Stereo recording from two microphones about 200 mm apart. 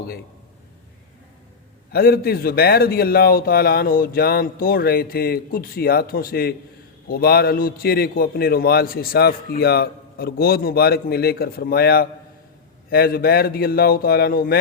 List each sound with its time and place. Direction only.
1.9 s a man's voice: 50° left (ahead or behind)